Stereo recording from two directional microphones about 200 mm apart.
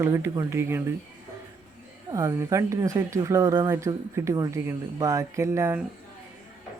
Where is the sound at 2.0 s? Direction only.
15° right (ahead or behind).